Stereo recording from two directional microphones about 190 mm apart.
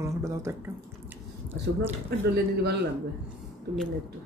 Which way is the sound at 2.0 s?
60° right (ahead or behind).